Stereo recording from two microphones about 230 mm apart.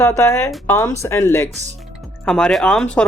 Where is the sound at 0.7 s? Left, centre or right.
Centre.